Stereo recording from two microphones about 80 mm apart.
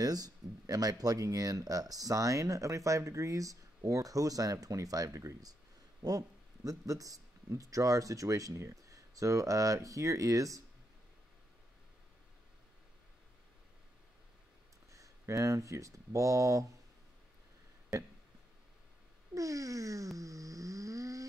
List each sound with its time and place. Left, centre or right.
0.0 s speech: right
14.9 s speech: right
19.3 s a sound: right